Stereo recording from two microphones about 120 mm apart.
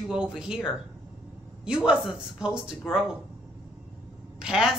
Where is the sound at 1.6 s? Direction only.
5° right (ahead or behind).